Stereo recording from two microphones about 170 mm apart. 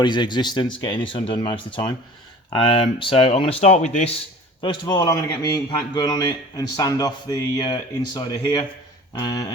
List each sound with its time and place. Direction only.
0.0 s a man's voice: 25° left (ahead or behind); by 4.1 s 40° left (ahead or behind)
4.6 s a man's voice: 25° left (ahead or behind)